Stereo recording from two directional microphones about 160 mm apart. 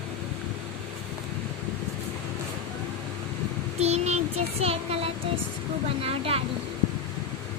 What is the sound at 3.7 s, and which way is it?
Child singing, 40° right (ahead or behind).